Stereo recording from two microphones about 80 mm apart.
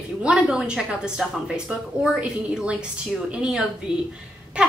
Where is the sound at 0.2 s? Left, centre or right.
Centre.